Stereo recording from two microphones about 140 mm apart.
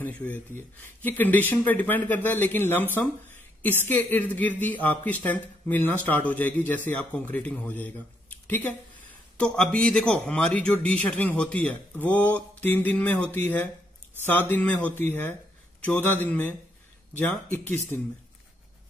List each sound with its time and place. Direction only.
0.0 s speech: 10° left (ahead or behind)